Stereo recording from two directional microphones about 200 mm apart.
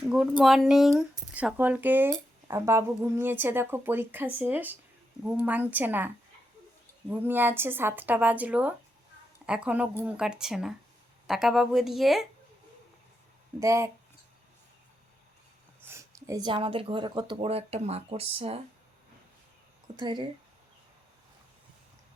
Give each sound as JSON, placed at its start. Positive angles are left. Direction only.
{"t": 0.1, "sound": "speech", "side_deg": 0}
{"t": 7.1, "sound": "speech", "side_deg": -10}
{"t": 13.6, "sound": "speech", "side_deg": -15}
{"t": 15.9, "sound": "speech", "side_deg": -15}
{"t": 20.0, "sound": "speech", "side_deg": -20}